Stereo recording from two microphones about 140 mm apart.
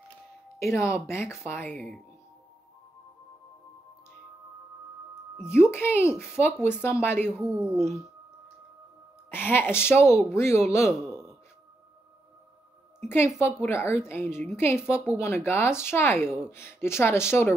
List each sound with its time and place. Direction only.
0.7 s speech: 20° left (ahead or behind)
5.5 s a child's voice: 15° left (ahead or behind)
7.2 s a woman's voice: 10° right (ahead or behind)
9.3 s speech: 15° left (ahead or behind)
11.0 s a sound: 5° right (ahead or behind)
13.4 s speech: 20° left (ahead or behind)